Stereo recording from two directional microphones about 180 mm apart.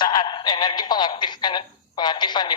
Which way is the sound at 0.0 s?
25° left (ahead or behind).